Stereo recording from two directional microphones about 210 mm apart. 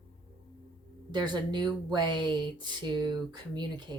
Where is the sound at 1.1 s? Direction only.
20° right (ahead or behind).